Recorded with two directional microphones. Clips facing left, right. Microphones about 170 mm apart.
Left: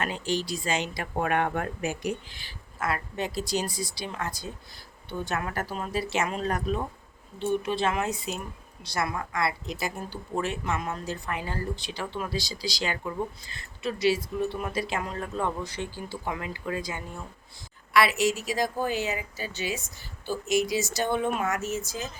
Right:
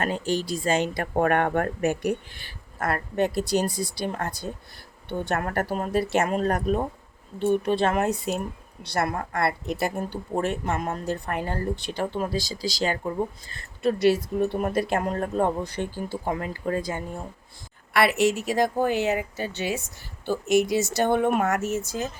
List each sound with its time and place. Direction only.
0.0 s speech: 50° right (ahead or behind)
10.3 s speech: 50° right (ahead or behind)
13.5 s speech: 50° right (ahead or behind)